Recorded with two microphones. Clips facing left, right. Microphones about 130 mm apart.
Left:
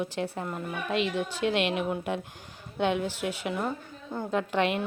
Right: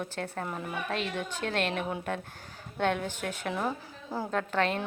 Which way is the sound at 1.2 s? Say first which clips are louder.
Left 4 dB; 10° left (ahead or behind).